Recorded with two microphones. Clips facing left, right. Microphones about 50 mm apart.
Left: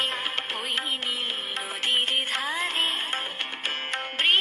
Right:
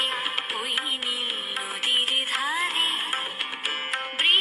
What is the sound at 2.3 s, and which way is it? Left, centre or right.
Music, centre.